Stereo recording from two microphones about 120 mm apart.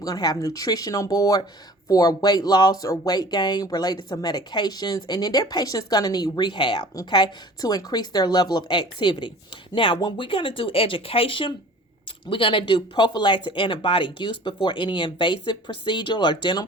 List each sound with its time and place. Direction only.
0.0 s speech: 30° left (ahead or behind)